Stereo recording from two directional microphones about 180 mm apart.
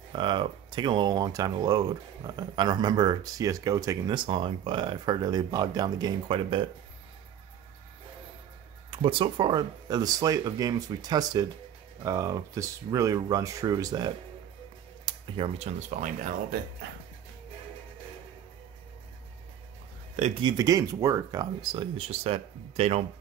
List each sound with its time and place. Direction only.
0.1 s speech: 25° right (ahead or behind)
8.9 s speech: 30° right (ahead or behind)
20.2 s speech: 40° right (ahead or behind)
20.4 s speech: 20° right (ahead or behind); by 23.0 s 35° right (ahead or behind)